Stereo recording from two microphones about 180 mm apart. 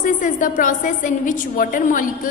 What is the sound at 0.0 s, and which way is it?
A woman's voice, 45° left (ahead or behind).